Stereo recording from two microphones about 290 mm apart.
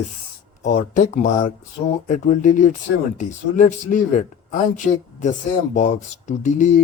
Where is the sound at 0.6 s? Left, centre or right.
Left.